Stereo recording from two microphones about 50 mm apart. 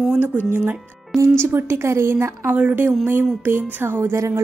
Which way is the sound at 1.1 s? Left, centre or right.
Right.